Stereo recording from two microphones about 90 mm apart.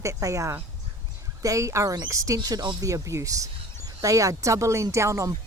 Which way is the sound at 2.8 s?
35° right (ahead or behind).